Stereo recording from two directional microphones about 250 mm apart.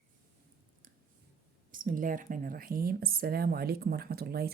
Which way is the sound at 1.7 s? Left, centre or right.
Right.